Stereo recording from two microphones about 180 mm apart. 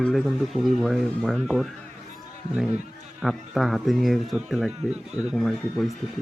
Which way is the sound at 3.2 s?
Centre (ahead or behind).